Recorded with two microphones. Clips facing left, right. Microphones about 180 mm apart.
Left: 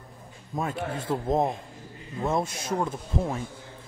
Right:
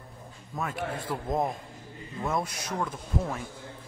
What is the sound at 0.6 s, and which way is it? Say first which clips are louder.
Speech: left 3 dB; 25° left (ahead or behind).